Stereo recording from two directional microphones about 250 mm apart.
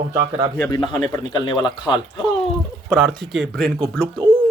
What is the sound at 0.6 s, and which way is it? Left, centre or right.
A man's voice, centre.